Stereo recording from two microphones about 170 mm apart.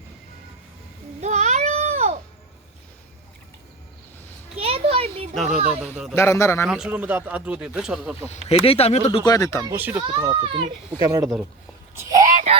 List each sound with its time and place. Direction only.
1.2 s baby cry: 45° right (ahead or behind)
4.5 s a sound: 35° right (ahead or behind)
5.3 s speech: centre (ahead or behind)
6.1 s a man's voice: 15° left (ahead or behind)
6.7 s speech: 5° right (ahead or behind)
8.3 s speech: 35° left (ahead or behind)
9.0 s speech: 25° left (ahead or behind)
9.7 s speech: 10° right (ahead or behind)
10.0 s a child's voice: 25° right (ahead or behind)
11.1 s speech: 15° right (ahead or behind)
11.9 s a sound: 20° right (ahead or behind)